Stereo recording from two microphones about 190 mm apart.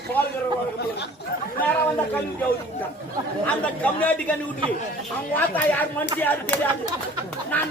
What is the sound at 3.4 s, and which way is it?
A man's voice, 10° left (ahead or behind).